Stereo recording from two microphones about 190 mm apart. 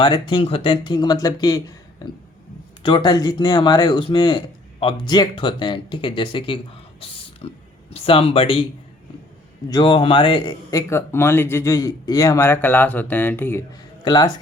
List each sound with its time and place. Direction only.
0.0 s speech: 25° left (ahead or behind)
2.8 s speech: 25° left (ahead or behind)
9.6 s speech: 20° left (ahead or behind)
14.0 s speech: 20° left (ahead or behind)